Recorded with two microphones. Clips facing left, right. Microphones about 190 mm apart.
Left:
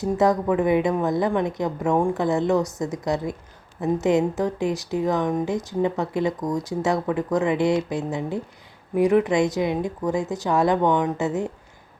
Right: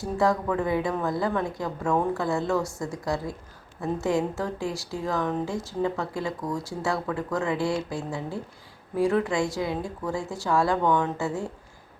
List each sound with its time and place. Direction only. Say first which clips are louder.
0.0 s speech: left 4 dB; 20° left (ahead or behind)